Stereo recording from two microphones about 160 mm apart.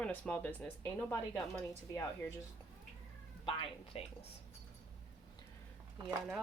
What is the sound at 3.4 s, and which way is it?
Speech, 35° left (ahead or behind).